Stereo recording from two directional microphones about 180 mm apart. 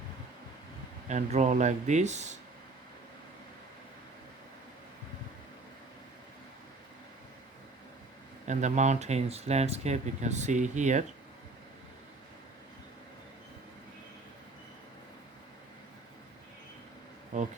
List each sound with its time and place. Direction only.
1.0 s speech: 40° right (ahead or behind)
8.4 s speech: 40° right (ahead or behind)
17.3 s a sound: 45° right (ahead or behind)